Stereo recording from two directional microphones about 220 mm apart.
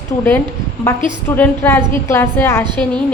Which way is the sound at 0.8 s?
10° left (ahead or behind).